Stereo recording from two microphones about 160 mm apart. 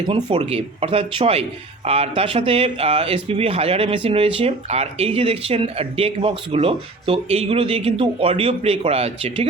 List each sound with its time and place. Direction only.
0.1 s speech: 35° right (ahead or behind)